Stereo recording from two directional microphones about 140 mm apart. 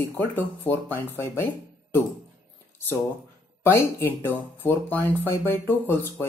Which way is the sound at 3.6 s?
15° left (ahead or behind).